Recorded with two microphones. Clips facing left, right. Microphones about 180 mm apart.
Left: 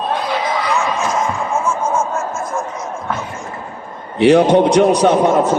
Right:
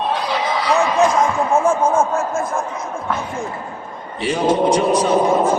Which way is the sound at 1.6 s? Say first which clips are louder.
Right 3 dB; 60° right (ahead or behind).